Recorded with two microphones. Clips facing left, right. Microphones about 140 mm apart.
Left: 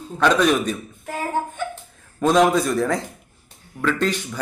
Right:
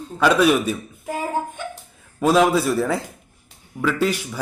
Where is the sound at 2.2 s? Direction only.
5° right (ahead or behind).